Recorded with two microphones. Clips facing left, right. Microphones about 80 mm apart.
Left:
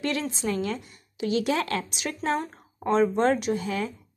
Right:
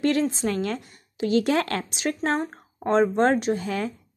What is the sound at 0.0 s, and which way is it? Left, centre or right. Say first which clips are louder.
Speech: right 6 dB; right.